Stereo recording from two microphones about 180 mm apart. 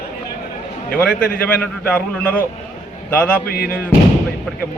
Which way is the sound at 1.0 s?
10° left (ahead or behind).